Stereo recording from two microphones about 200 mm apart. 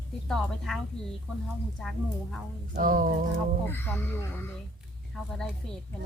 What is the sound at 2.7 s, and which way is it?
Speech, 45° right (ahead or behind).